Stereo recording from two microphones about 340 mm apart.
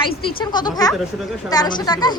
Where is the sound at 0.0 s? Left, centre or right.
Centre.